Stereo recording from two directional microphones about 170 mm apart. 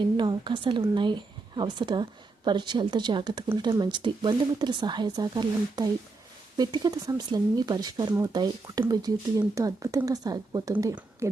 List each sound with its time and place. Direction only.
0.2 s speech: 25° right (ahead or behind)